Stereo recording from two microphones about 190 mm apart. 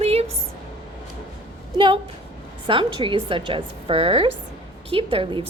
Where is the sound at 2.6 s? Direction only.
25° right (ahead or behind).